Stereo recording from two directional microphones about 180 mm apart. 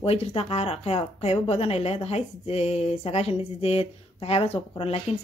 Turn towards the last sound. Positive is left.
turn(degrees=35)  # may be behind; listen again after turning